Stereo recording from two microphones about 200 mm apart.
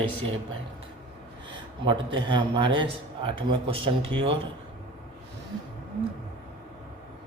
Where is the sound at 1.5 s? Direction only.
25° right (ahead or behind).